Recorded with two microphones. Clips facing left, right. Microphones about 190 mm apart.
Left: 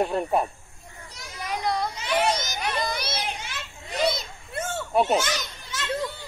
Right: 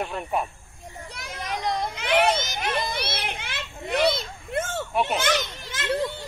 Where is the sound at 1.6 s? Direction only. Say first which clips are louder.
Left 1 dB; 20° right (ahead or behind).